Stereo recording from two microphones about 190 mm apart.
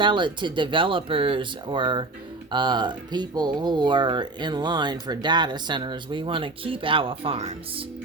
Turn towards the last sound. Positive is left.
turn(degrees=-30)  # may be behind; listen again after turning